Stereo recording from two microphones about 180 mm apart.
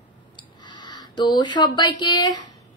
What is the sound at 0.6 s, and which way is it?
Speech, 25° left (ahead or behind).